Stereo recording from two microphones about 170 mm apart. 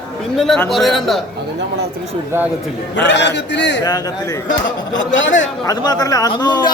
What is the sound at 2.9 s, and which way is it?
Speech, 90° left.